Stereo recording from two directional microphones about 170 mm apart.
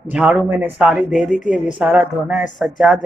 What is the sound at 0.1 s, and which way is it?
A woman's voice, 5° right (ahead or behind).